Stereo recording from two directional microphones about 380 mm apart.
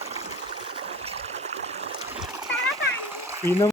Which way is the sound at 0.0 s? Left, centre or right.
Centre.